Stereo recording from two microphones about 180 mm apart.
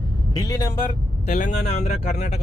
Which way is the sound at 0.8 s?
40° left (ahead or behind).